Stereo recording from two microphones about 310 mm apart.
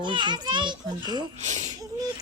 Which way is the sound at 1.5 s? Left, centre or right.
Right.